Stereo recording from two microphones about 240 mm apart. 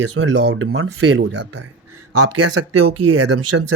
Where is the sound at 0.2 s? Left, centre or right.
Right.